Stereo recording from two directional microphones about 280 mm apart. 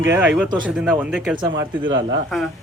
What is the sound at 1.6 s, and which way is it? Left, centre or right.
Speech, right.